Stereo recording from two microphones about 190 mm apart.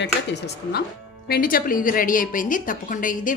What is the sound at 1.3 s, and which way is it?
A woman's voice, 50° left (ahead or behind).